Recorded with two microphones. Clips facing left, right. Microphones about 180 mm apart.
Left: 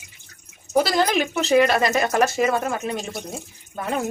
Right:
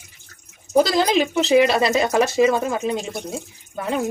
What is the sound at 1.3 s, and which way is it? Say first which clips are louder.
Speech: right 2 dB; 15° right (ahead or behind).